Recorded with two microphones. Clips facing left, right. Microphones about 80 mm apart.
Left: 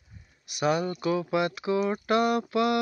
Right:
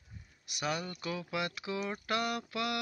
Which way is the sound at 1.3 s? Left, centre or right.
Left.